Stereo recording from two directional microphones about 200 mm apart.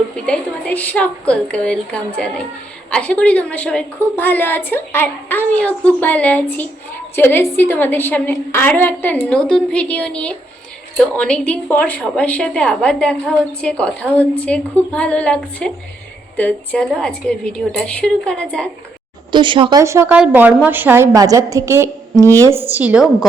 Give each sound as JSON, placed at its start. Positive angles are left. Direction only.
{"t": 0.3, "sound": "a woman's voice", "side_deg": 5}
{"t": 19.3, "sound": "speech", "side_deg": -25}
{"t": 19.8, "sound": "a woman's voice", "side_deg": -15}
{"t": 22.3, "sound": "a woman's voice", "side_deg": 10}
{"t": 22.5, "sound": "a woman's voice", "side_deg": -10}